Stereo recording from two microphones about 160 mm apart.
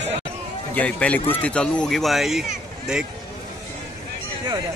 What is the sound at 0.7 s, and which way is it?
Speech, 10° left (ahead or behind).